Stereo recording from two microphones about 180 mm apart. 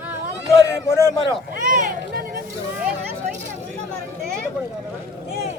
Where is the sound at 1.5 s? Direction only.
50° right (ahead or behind).